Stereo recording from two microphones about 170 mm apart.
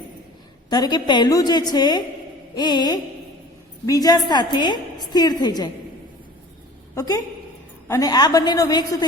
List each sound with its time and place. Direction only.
0.7 s a woman's voice: 25° left (ahead or behind)
6.9 s a woman's voice: 20° left (ahead or behind)